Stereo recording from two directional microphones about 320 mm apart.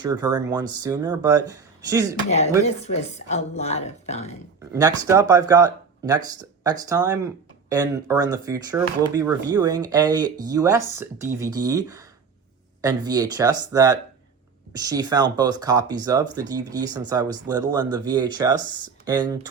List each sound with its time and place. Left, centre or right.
0.0 s speech: centre
2.6 s a woman's voice: centre
4.7 s speech: centre